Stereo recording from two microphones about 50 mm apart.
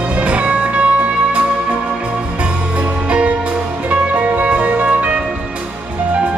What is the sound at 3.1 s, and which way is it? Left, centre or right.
Music, right.